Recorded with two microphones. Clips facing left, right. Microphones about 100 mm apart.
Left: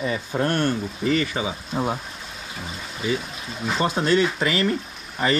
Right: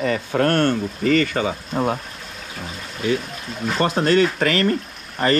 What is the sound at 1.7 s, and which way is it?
Speech, 5° right (ahead or behind).